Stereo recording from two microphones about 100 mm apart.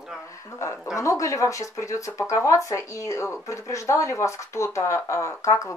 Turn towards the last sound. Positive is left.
turn(degrees=30)  # may be behind; listen again after turning